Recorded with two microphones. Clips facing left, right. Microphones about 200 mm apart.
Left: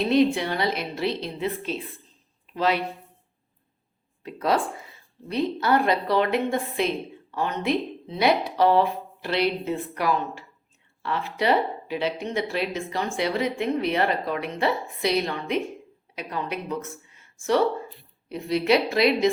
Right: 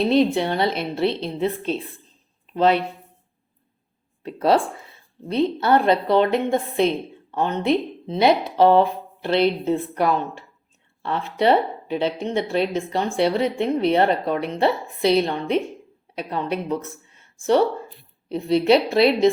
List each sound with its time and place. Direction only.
0.1 s speech: 30° right (ahead or behind)
4.2 s speech: 30° right (ahead or behind)